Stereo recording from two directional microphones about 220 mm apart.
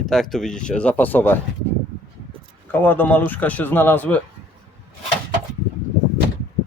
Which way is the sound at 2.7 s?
10° left (ahead or behind).